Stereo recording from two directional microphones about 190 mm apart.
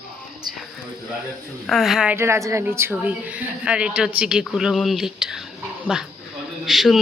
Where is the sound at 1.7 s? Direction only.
Centre (ahead or behind).